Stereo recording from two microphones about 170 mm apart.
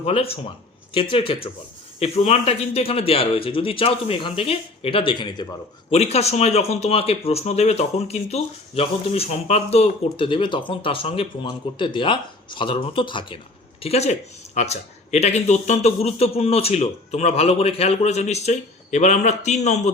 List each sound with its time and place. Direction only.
0.0 s speech: 35° left (ahead or behind)